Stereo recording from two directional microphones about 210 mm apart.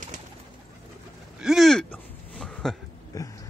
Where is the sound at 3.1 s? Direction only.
15° left (ahead or behind).